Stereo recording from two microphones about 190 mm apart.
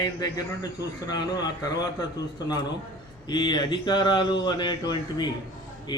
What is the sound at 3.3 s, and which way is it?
Speech, 25° left (ahead or behind).